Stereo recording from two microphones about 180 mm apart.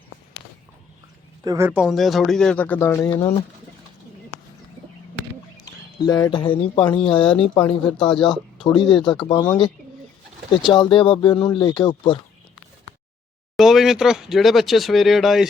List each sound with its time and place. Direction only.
1.5 s speech: 15° right (ahead or behind)
1.8 s speech: centre (ahead or behind)
3.1 s speech: 25° left (ahead or behind)
6.1 s speech: 20° left (ahead or behind)
10.7 s speech: 25° left (ahead or behind)
13.6 s speech: centre (ahead or behind)